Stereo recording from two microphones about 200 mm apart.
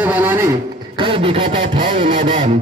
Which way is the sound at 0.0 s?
10° right (ahead or behind).